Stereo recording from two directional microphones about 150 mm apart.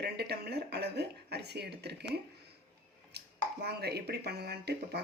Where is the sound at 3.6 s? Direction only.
90° right.